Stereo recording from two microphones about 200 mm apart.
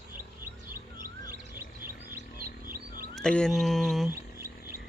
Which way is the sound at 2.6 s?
45° right (ahead or behind).